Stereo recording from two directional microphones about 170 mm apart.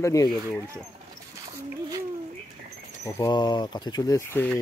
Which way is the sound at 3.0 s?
25° left (ahead or behind).